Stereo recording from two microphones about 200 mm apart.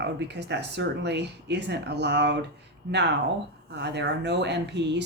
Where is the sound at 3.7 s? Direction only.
60° right (ahead or behind).